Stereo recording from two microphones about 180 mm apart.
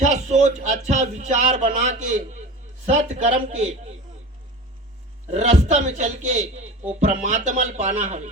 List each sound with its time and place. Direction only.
0.0 s a man's voice: 40° right (ahead or behind)
5.3 s a man's voice: 40° right (ahead or behind)